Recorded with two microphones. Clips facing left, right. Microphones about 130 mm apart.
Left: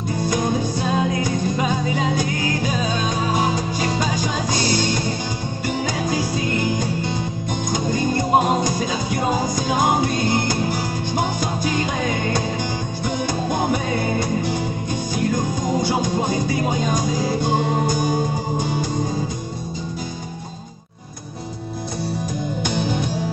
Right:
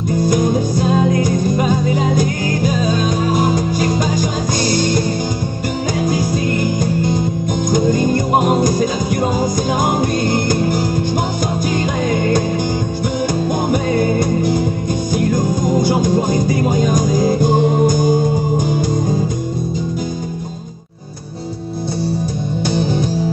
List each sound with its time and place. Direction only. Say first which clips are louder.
0.3 s music: right 4 dB; 45° right (ahead or behind)
6.3 s music: right 4 dB; 45° right (ahead or behind)
14.2 s music: right 6 dB; 45° right (ahead or behind)
22.7 s music: right 6 dB; 40° right (ahead or behind)